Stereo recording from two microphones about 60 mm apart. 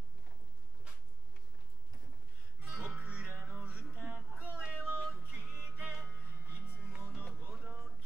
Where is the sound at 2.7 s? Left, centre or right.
Centre.